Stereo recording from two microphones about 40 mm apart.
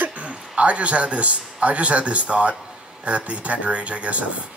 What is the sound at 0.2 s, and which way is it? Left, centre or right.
A man's voice, right.